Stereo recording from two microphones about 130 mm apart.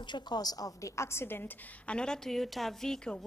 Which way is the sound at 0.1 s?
30° left (ahead or behind).